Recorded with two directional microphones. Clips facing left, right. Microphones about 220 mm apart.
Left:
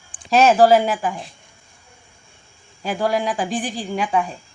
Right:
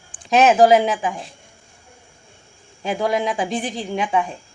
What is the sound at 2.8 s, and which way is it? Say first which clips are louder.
Speech: even; 20° right (ahead or behind).